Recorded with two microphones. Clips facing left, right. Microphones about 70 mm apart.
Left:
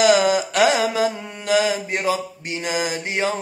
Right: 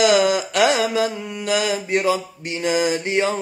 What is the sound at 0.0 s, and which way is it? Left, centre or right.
Mantra, left.